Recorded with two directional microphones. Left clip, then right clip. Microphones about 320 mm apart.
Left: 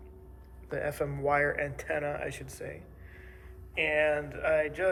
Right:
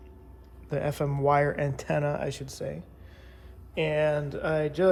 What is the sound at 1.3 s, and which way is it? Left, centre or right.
Speech, centre.